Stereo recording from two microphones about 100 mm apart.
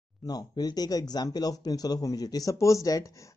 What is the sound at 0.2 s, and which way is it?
Speech, 40° left (ahead or behind).